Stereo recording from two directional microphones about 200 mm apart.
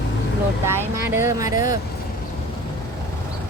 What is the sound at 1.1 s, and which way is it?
Speech, 15° right (ahead or behind).